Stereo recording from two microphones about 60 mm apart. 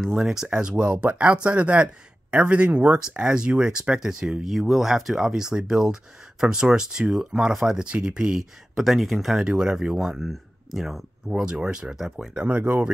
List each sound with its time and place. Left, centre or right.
0.2 s speech: centre
9.5 s speech: centre
11.2 s speech: centre
12.4 s speech: right